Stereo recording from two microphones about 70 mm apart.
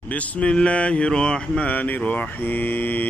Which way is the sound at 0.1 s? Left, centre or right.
Centre.